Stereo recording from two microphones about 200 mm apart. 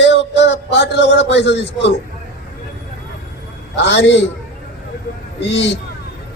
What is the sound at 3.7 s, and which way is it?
Speech, 60° left (ahead or behind).